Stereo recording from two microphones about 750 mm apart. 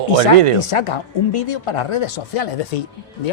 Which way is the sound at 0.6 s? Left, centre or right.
Left.